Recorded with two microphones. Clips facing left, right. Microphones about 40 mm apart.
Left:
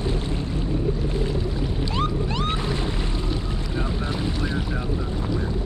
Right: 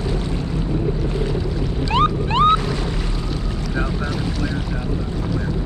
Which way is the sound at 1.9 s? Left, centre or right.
Right.